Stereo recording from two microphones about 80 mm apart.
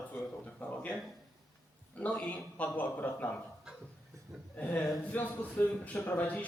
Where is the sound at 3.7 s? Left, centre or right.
Centre.